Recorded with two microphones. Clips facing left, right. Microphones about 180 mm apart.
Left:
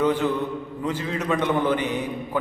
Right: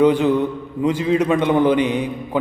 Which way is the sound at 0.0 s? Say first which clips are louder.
Right 7 dB; 15° right (ahead or behind).